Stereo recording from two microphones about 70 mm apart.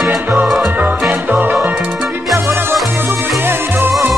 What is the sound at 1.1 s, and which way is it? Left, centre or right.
Music, right.